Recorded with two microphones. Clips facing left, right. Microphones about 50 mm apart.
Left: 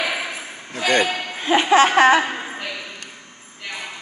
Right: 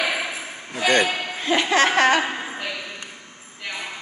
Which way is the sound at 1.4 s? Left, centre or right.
Centre.